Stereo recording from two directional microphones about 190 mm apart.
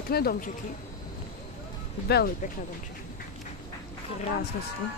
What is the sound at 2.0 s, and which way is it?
Speech, 60° left (ahead or behind).